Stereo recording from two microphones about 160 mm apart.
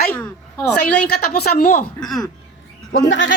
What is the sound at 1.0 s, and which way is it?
Speech, 75° left (ahead or behind).